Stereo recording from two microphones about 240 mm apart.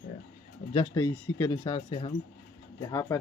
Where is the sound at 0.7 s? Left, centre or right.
Centre.